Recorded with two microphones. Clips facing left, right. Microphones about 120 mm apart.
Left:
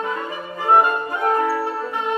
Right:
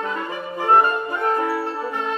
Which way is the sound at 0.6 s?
10° left (ahead or behind).